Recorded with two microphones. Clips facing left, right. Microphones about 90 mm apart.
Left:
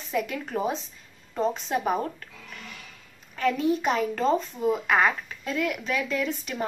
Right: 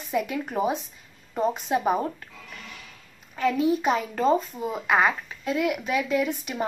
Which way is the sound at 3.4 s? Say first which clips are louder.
Right 1 dB; 10° right (ahead or behind).